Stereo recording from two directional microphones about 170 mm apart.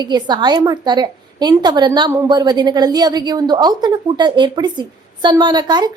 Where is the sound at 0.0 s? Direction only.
25° right (ahead or behind).